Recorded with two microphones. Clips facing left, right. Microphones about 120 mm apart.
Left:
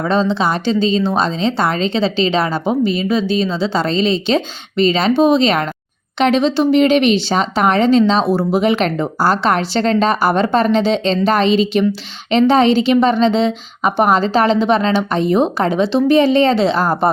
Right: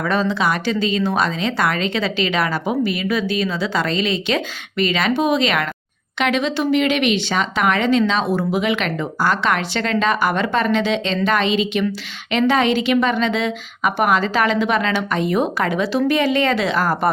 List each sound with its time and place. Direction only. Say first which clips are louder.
0.0 s a woman's voice: left 3 dB; 25° left (ahead or behind)